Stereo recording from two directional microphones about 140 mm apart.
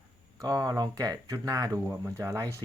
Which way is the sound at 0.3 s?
25° right (ahead or behind).